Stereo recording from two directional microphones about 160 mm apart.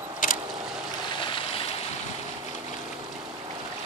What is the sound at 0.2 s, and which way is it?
Boat, 55° left (ahead or behind).